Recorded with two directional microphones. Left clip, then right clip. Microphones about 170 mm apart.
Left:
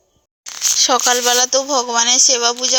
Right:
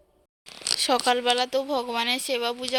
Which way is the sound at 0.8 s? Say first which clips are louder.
Left 8 dB; 5° left (ahead or behind).